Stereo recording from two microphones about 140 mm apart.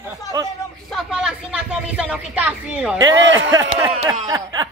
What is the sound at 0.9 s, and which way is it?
Speech, 5° right (ahead or behind).